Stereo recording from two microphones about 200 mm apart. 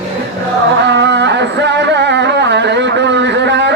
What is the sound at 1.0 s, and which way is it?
Music, 60° right (ahead or behind).